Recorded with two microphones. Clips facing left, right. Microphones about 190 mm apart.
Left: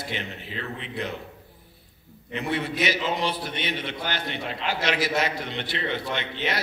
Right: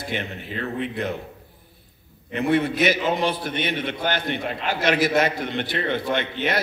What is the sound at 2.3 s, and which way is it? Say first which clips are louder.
A man's voice: right 7 dB; 50° right (ahead or behind).